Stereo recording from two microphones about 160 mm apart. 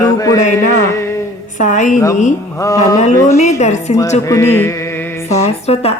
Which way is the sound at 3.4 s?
45° left (ahead or behind).